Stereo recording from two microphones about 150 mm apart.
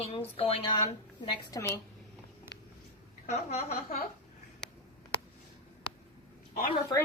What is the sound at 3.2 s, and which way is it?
Speech, 45° left (ahead or behind).